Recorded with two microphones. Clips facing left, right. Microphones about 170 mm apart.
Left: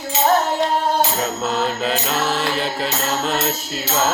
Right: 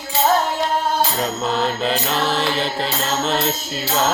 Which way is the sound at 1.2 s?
5° left (ahead or behind).